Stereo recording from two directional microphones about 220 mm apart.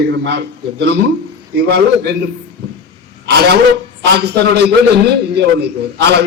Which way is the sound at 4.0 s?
50° right (ahead or behind).